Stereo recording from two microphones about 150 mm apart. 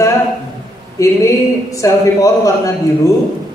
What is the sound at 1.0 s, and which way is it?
A man's voice, 20° left (ahead or behind).